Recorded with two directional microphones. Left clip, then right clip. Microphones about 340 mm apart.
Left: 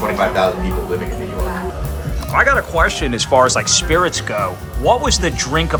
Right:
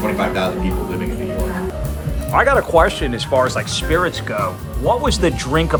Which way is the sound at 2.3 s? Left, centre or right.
Centre.